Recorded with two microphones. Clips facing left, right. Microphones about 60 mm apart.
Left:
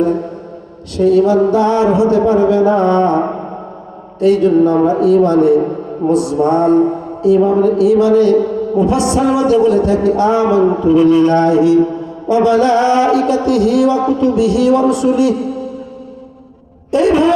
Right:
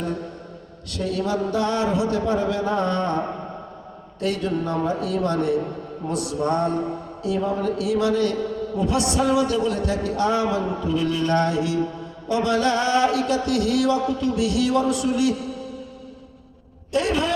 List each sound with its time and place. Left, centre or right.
0.0 s mantra: left
0.9 s a man's voice: left
16.9 s a man's voice: left